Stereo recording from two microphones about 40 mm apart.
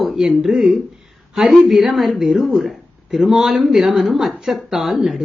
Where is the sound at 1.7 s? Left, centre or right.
Centre.